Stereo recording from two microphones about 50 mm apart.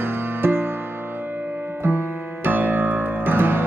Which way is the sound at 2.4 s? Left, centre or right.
Right.